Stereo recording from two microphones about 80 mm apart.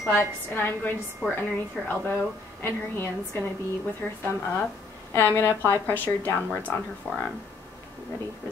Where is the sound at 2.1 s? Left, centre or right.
Left.